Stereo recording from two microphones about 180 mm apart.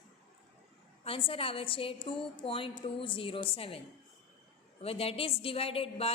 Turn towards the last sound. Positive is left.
turn(degrees=30)  # may be behind; listen again after turning